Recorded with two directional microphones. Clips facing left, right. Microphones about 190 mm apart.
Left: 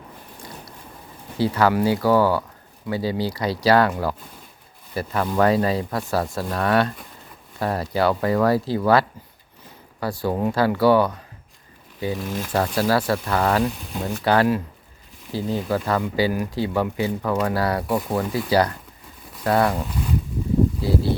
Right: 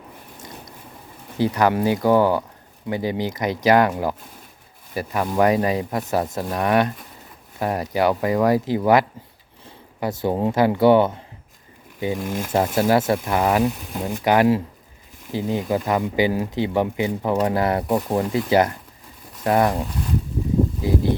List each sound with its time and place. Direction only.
0.3 s a sound: 20° right (ahead or behind)
1.4 s speech: 20° right (ahead or behind)
12.5 s speech: 20° right (ahead or behind)
20.8 s speech: 15° right (ahead or behind)